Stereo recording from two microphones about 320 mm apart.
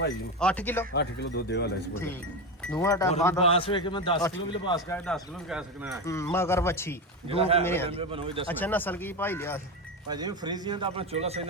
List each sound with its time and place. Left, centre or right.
0.3 s speech: centre
0.9 s speech: left
2.6 s a man's voice: centre
6.1 s a man's voice: centre
7.3 s a man's voice: centre
7.6 s a man's voice: centre
7.9 s a man's voice: centre
8.4 s a man's voice: centre
10.1 s a man's voice: centre